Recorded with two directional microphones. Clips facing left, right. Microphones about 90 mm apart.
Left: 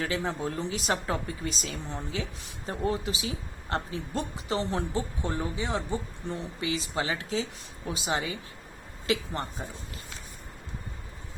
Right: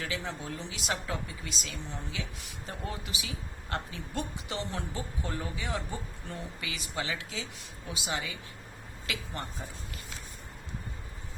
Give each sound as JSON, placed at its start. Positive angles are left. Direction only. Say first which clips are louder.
{"t": 0.0, "sound": "speech", "louder": "left 6 dB", "side_deg": 40}